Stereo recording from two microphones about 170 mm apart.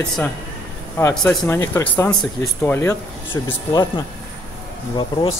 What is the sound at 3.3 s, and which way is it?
Speech, 25° left (ahead or behind).